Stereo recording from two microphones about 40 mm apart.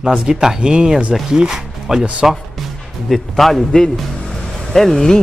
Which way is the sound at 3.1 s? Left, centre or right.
Centre.